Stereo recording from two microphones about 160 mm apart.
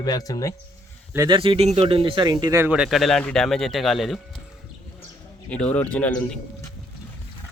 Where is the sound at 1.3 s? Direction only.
30° right (ahead or behind).